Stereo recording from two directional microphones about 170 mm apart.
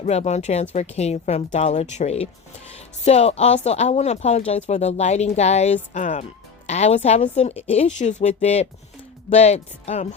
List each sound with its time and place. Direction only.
0.0 s speech: 40° left (ahead or behind)